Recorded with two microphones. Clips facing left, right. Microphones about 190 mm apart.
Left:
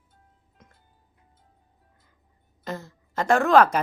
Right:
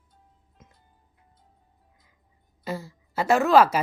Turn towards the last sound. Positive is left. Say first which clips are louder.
# even
turn(degrees=-5)  # may be behind; listen again after turning